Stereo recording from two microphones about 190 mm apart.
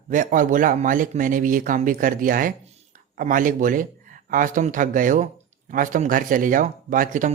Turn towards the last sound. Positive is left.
turn(degrees=-45)  # may be behind; listen again after turning